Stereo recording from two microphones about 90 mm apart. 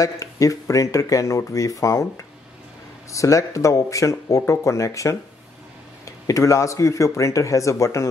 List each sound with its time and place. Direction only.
0.0 s speech: 40° left (ahead or behind)
6.2 s speech: 35° left (ahead or behind)